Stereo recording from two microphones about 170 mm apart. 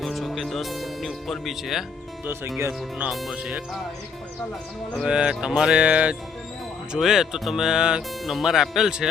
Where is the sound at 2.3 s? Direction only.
15° right (ahead or behind).